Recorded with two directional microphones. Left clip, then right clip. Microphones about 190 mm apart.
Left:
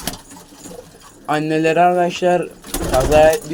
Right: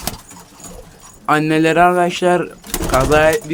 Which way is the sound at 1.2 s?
30° right (ahead or behind).